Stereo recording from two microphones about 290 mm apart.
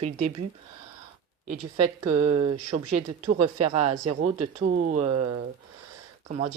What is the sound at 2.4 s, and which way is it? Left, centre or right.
Speech, centre.